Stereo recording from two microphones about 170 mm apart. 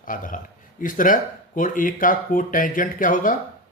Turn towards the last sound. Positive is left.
turn(degrees=50)  # may be behind; listen again after turning